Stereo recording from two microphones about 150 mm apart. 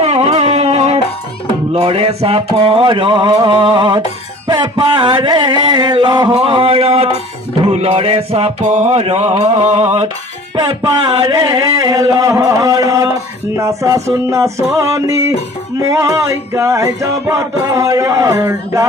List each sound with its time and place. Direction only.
0.0 s music: 40° right (ahead or behind)
8.6 s mantra: 50° right (ahead or behind)
10.5 s music: 30° right (ahead or behind)